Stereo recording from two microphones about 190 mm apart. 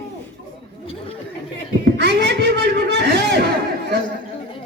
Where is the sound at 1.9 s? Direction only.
65° right (ahead or behind).